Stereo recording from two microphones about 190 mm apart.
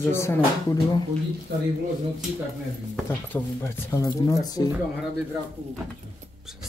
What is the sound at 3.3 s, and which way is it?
Speech, 15° left (ahead or behind).